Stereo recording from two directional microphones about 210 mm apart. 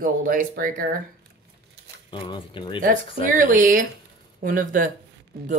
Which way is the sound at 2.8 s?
40° right (ahead or behind).